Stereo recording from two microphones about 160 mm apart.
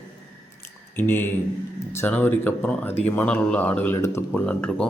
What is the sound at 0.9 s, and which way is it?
Speech, 15° left (ahead or behind).